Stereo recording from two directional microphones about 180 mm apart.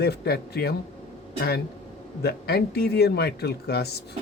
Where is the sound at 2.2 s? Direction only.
60° left (ahead or behind).